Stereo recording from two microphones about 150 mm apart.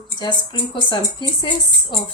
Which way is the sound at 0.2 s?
35° left (ahead or behind).